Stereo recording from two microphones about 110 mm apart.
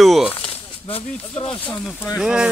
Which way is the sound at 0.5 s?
55° left (ahead or behind).